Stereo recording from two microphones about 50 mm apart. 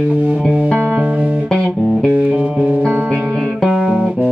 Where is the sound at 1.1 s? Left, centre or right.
Right.